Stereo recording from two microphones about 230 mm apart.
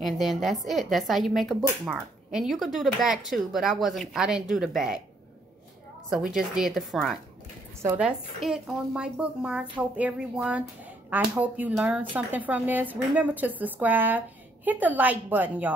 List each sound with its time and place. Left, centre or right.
0.0 s speech: centre
6.0 s a woman's voice: centre